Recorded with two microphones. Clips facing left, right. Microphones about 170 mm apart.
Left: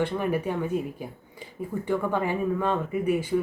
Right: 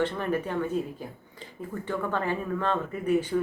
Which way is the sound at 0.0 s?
10° left (ahead or behind).